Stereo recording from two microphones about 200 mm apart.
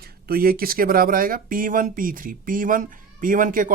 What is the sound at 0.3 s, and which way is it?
Speech, 45° right (ahead or behind).